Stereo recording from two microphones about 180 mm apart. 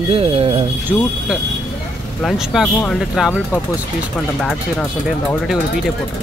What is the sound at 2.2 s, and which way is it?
Speech, centre (ahead or behind).